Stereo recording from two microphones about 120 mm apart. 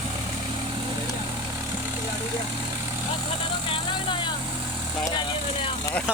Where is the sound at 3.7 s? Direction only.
40° left (ahead or behind).